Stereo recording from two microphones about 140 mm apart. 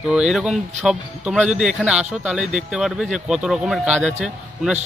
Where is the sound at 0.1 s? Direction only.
5° right (ahead or behind).